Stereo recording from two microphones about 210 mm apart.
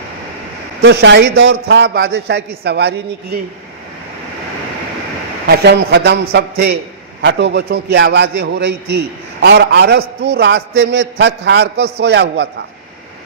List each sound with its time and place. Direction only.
0.8 s a man's voice: 50° right (ahead or behind)
5.5 s a man's voice: 50° right (ahead or behind)
7.2 s a man's voice: 55° right (ahead or behind)